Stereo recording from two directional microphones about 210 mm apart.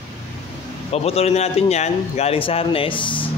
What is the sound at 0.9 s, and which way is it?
A man's voice, 30° left (ahead or behind).